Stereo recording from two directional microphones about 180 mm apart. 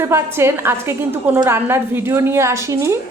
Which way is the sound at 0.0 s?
15° right (ahead or behind).